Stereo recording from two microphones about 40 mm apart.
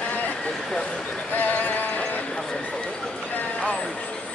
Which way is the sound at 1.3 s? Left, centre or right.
Left.